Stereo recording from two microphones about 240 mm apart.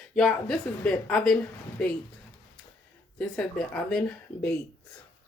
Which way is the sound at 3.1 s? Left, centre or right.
Centre.